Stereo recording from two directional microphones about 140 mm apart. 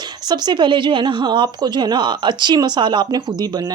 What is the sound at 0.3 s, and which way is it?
A woman's voice, 30° right (ahead or behind).